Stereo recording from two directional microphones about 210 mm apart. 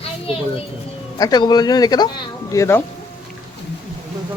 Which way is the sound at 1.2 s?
20° left (ahead or behind).